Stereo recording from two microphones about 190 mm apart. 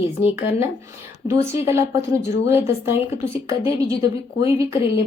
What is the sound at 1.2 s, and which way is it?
A woman's voice, 15° right (ahead or behind).